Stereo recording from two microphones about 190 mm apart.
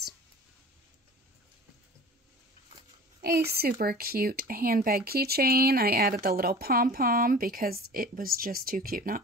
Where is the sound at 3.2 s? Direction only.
55° right (ahead or behind).